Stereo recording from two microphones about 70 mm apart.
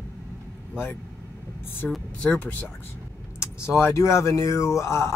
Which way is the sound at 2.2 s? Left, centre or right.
Centre.